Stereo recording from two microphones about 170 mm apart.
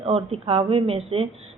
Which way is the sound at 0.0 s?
35° right (ahead or behind).